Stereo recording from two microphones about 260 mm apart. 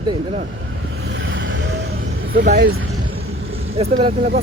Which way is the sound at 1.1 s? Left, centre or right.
Right.